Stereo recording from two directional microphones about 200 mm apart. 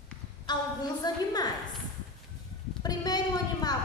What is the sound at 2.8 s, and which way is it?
Speech, 20° left (ahead or behind).